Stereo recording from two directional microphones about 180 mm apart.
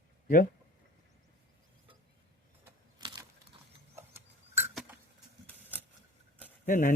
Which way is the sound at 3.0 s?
25° right (ahead or behind).